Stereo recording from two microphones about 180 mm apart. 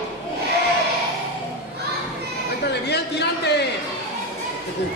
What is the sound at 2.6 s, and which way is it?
A man's voice, 65° left (ahead or behind).